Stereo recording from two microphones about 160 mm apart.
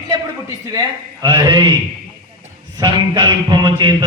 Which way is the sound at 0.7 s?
25° right (ahead or behind).